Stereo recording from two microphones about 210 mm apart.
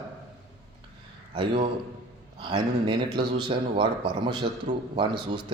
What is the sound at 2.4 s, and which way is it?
Speech, 20° right (ahead or behind).